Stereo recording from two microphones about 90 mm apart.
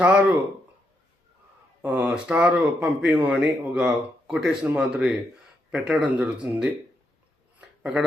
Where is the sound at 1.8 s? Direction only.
10° right (ahead or behind).